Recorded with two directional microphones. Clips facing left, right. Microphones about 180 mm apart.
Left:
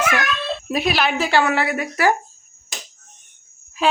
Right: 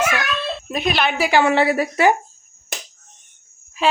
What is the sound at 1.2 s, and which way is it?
Speech, 15° right (ahead or behind).